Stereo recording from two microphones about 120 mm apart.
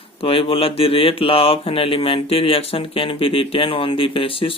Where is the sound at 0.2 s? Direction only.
50° left (ahead or behind).